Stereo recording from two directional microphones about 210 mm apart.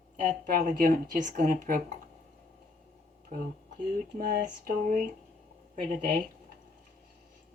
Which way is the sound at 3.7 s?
45° right (ahead or behind).